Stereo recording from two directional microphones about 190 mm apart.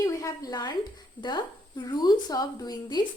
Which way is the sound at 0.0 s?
15° left (ahead or behind).